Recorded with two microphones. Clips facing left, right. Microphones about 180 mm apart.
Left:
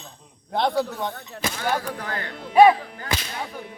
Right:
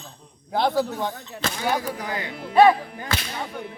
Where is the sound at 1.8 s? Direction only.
10° right (ahead or behind).